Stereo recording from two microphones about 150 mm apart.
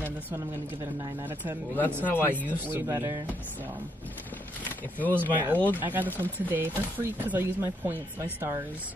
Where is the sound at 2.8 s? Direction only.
15° right (ahead or behind).